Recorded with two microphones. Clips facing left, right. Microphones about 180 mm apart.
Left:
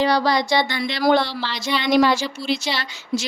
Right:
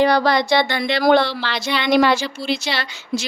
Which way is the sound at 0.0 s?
55° right (ahead or behind).